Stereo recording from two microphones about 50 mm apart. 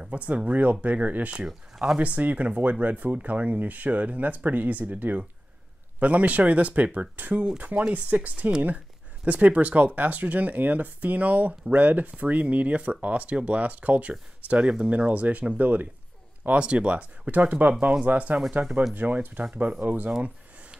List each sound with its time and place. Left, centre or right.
0.0 s speech: right
1.3 s speech: centre
2.0 s speech: right
16.5 s speech: right